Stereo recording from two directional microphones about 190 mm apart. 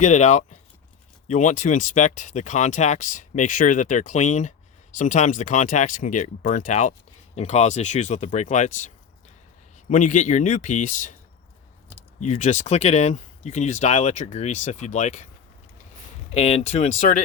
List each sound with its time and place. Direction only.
0.0 s speech: 40° left (ahead or behind)
9.9 s speech: 40° left (ahead or behind)
12.2 s speech: 40° left (ahead or behind)
16.3 s speech: 35° left (ahead or behind)